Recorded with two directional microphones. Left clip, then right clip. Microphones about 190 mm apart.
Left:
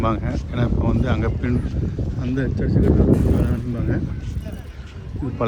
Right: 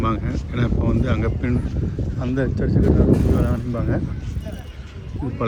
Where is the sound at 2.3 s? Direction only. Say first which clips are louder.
Right 1 dB; 5° right (ahead or behind).